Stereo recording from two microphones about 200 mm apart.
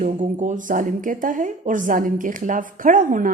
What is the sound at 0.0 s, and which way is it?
A woman's voice, 40° right (ahead or behind).